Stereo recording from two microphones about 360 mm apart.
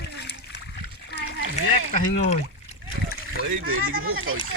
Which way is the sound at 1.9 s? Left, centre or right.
Centre.